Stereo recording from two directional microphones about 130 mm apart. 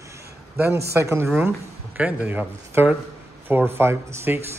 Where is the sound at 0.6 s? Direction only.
20° right (ahead or behind).